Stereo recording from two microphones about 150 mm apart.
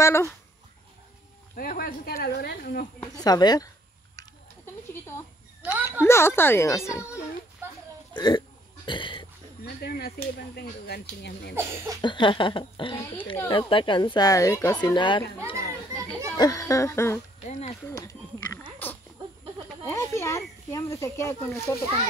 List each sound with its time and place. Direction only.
0.0 s speech: 20° left (ahead or behind)
1.5 s speech: 70° left (ahead or behind)
3.0 s a child's voice: 25° left (ahead or behind)
5.7 s a woman's voice: 15° right (ahead or behind)
5.9 s a woman's voice: 15° left (ahead or behind)
8.2 s burping: 30° left (ahead or behind)
9.8 s speech: 90° left
11.5 s a sound: 15° right (ahead or behind)
12.0 s a child's voice: 30° left (ahead or behind)
16.3 s a child's voice: 25° left (ahead or behind)
17.5 s speech: 50° left (ahead or behind)
17.8 s a child's voice: 20° left (ahead or behind)
18.8 s a sound: 15° left (ahead or behind)
19.8 s a child's voice: 15° left (ahead or behind)